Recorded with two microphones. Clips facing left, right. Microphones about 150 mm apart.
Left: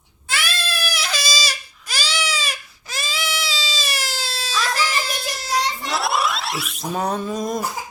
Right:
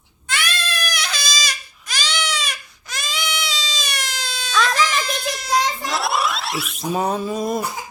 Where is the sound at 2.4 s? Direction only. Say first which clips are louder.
Even; 5° left (ahead or behind).